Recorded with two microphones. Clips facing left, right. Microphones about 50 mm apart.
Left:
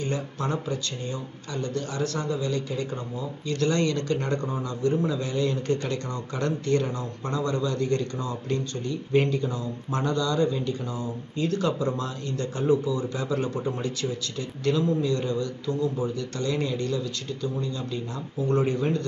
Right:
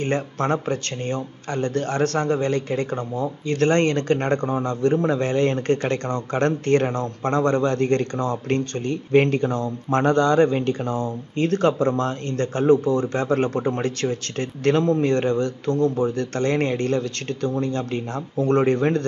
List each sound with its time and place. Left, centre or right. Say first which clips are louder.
0.0 s speech: right 6 dB; right